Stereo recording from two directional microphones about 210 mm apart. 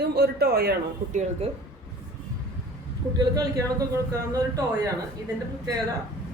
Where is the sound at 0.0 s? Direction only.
50° right (ahead or behind).